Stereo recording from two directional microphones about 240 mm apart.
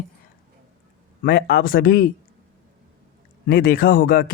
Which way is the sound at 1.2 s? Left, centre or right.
Left.